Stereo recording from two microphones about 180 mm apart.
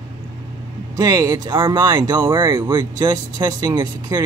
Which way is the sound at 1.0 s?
20° right (ahead or behind).